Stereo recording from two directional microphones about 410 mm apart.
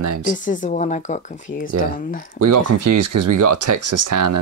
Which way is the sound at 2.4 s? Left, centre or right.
Right.